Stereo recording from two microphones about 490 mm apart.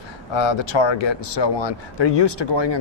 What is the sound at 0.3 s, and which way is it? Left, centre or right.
Speech, left.